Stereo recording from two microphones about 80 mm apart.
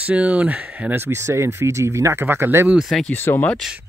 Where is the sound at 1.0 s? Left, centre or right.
Right.